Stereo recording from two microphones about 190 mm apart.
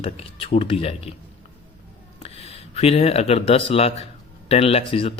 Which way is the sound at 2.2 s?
30° left (ahead or behind).